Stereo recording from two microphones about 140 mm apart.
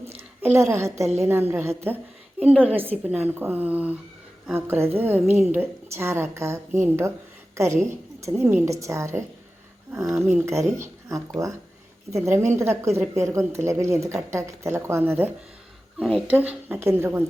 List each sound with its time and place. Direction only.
0.4 s a woman's voice: 20° right (ahead or behind)
1.0 s a woman's voice: 50° right (ahead or behind)
1.3 s a woman's voice: 15° right (ahead or behind)
2.4 s a woman's voice: 5° right (ahead or behind)
3.2 s a woman's voice: 15° right (ahead or behind)
10.2 s a woman's voice: 5° right (ahead or behind)
10.4 s a woman's voice: 20° right (ahead or behind)
16.0 s a woman's voice: 5° left (ahead or behind)
16.2 s a woman's voice: 10° right (ahead or behind)